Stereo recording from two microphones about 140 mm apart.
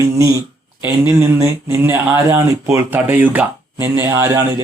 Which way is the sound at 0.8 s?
20° right (ahead or behind).